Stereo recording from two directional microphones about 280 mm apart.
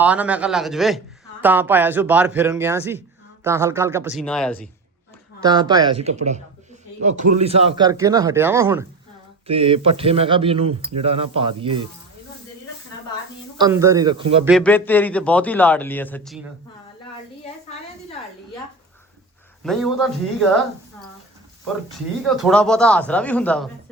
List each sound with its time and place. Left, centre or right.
0.0 s a man's voice: centre
5.4 s a man's voice: centre
9.5 s speech: centre
13.6 s a man's voice: centre
14.4 s a man's voice: centre
19.6 s a man's voice: centre
22.4 s a man's voice: centre